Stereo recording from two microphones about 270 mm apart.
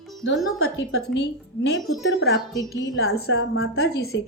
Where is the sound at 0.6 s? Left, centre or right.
Left.